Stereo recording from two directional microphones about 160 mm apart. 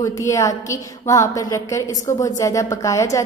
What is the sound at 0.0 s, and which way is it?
A woman's voice, 20° left (ahead or behind).